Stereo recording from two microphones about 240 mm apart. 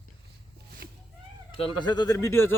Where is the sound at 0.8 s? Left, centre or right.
Right.